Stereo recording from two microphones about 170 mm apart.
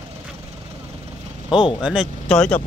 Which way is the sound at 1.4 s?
30° left (ahead or behind).